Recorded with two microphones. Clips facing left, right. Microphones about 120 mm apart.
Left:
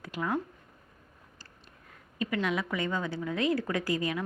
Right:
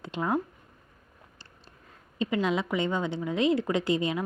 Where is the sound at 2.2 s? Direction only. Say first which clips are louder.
Right 3 dB; 20° right (ahead or behind).